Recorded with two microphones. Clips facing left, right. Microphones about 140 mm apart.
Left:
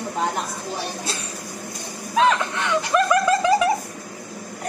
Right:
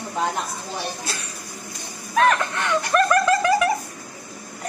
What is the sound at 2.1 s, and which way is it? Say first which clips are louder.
Speech: even; 15° left (ahead or behind).